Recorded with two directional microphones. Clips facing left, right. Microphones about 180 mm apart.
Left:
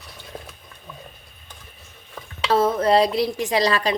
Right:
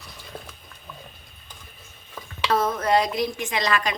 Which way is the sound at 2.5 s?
30° left (ahead or behind).